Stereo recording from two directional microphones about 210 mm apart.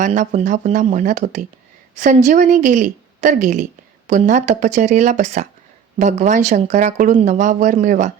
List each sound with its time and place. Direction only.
0.0 s a woman's voice: 35° right (ahead or behind)